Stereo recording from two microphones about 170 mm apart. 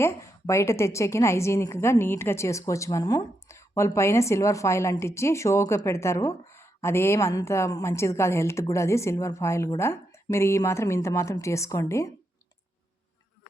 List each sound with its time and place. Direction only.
0.0 s a woman's voice: 15° left (ahead or behind)